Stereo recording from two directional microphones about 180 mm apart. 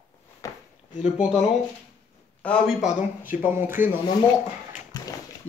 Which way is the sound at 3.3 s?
10° right (ahead or behind).